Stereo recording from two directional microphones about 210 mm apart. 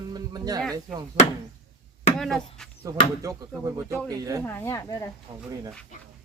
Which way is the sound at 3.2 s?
15° right (ahead or behind).